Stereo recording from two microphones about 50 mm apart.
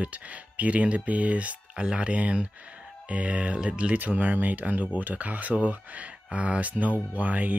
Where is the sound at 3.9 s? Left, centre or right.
Right.